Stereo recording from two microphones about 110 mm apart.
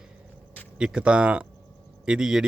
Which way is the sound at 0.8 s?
10° right (ahead or behind).